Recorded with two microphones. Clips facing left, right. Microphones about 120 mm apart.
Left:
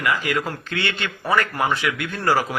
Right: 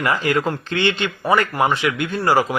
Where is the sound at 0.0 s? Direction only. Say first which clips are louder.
Right 4 dB; 30° right (ahead or behind).